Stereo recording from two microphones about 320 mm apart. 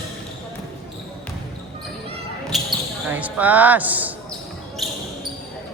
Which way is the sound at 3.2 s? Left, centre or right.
Centre.